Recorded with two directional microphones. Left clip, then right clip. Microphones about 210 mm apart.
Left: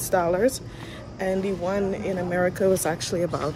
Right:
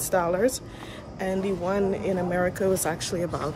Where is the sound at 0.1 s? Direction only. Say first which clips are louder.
Left 2 dB; 10° right (ahead or behind).